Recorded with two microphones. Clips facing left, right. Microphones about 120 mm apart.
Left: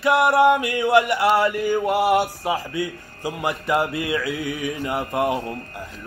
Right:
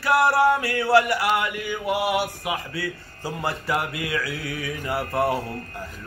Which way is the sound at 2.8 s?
20° left (ahead or behind).